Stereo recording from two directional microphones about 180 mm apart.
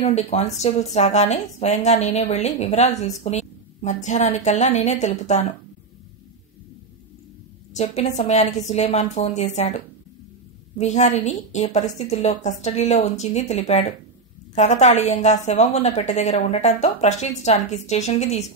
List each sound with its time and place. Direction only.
0.0 s a woman's voice: 35° left (ahead or behind)
7.7 s a woman's voice: 35° left (ahead or behind)